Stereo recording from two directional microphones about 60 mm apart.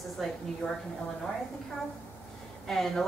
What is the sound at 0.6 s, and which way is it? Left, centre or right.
Speech, left.